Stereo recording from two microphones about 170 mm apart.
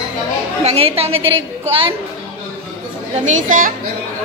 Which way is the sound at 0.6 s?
35° right (ahead or behind).